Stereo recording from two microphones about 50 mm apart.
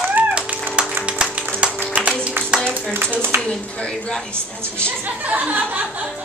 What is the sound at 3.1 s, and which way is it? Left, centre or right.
Speech, right.